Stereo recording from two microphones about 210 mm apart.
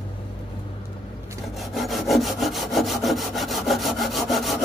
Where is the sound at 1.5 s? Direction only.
Centre (ahead or behind).